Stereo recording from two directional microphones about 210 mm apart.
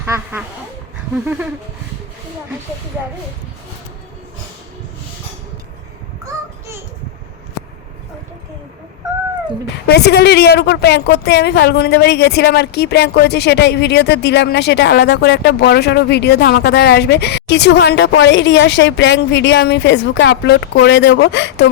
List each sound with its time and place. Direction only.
0.0 s duck: 10° right (ahead or behind)
1.1 s a sound: 10° right (ahead or behind)
9.8 s a woman's voice: 50° left (ahead or behind)